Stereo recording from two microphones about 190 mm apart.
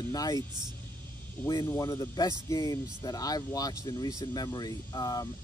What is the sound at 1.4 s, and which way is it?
Speech, 15° left (ahead or behind).